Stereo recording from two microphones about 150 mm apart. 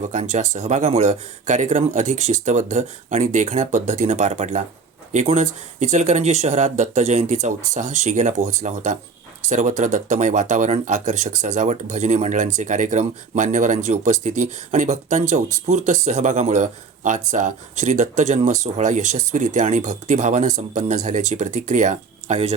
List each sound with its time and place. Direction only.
0.1 s speech: 50° right (ahead or behind)